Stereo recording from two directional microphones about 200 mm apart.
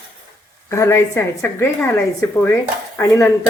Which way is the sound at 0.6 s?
15° left (ahead or behind).